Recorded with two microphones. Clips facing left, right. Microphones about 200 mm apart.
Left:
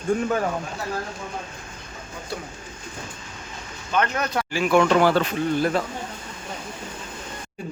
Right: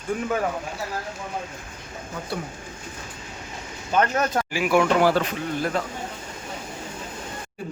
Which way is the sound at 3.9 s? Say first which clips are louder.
Right 2 dB; 45° right (ahead or behind).